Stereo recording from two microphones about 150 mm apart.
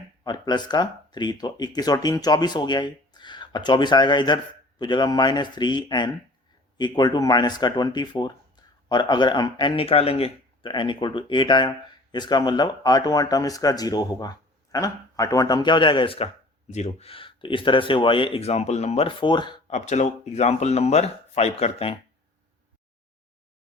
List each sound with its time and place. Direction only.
0.3 s speech: 30° left (ahead or behind)
16.6 s speech: 50° left (ahead or behind); by 19.5 s 30° left (ahead or behind)
19.6 s speech: 50° left (ahead or behind)